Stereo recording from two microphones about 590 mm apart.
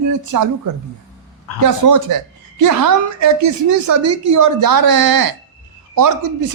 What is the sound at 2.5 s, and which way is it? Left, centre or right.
A woman's voice, right.